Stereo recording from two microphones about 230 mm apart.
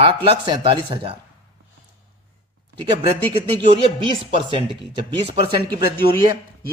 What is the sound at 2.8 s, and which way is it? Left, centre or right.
A man's voice, right.